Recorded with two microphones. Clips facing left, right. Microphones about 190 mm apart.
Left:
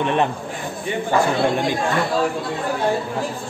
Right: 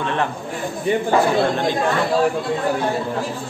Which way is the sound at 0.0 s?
20° left (ahead or behind).